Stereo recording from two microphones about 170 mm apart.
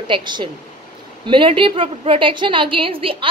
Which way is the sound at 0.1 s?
25° right (ahead or behind).